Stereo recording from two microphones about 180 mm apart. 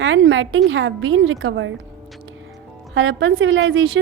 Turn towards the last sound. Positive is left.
turn(degrees=-90)